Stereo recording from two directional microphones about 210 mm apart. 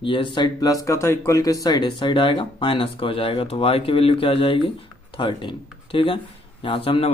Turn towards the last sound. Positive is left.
turn(degrees=25)  # may be behind; listen again after turning